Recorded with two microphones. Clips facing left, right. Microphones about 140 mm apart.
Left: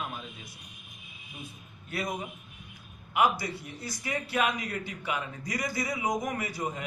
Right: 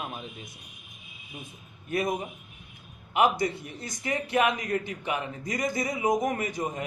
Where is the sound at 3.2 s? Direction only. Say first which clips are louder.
Right 3 dB; 20° right (ahead or behind).